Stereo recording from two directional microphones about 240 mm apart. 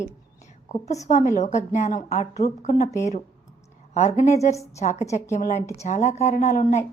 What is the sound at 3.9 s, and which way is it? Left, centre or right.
A woman's voice, left.